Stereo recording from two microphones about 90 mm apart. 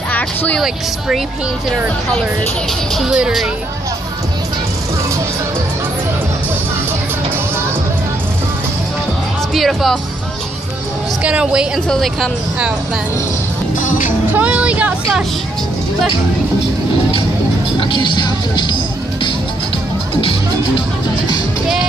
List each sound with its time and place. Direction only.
0.1 s music: 20° left (ahead or behind)
0.6 s speech: centre (ahead or behind)
3.0 s a woman's voice: 10° right (ahead or behind)
9.5 s speech: centre (ahead or behind)
11.2 s a woman's voice: 10° right (ahead or behind)
11.9 s speech: 5° left (ahead or behind)
14.3 s vehicle: 15° right (ahead or behind)
17.7 s speech: 65° left (ahead or behind)